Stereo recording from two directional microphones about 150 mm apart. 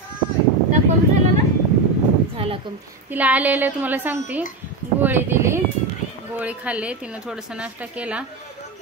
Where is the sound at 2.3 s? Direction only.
40° right (ahead or behind).